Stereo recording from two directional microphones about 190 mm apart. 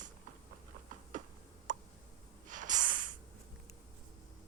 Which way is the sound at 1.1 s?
45° right (ahead or behind).